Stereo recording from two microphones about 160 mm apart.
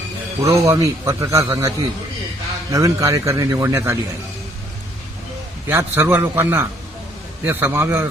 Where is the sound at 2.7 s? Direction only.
20° right (ahead or behind).